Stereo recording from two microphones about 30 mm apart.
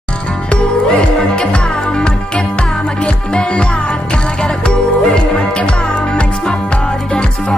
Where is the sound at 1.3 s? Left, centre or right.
Left.